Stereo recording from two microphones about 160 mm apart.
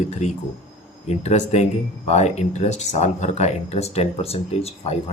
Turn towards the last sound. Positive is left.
turn(degrees=40)  # may be behind; listen again after turning